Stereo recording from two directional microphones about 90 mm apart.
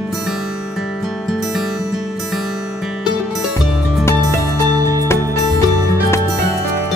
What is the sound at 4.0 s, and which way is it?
Music, 30° left (ahead or behind).